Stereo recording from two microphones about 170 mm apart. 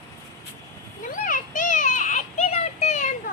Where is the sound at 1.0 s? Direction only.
50° left (ahead or behind).